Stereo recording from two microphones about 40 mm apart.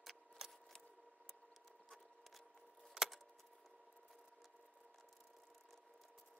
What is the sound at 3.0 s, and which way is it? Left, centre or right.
Keys jangling, centre.